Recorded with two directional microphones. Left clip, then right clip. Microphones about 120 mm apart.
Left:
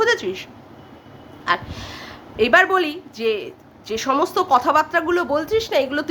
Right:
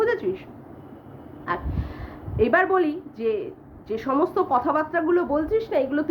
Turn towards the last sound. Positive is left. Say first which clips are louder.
# left 3 dB
turn(degrees=20)  # may be behind; listen again after turning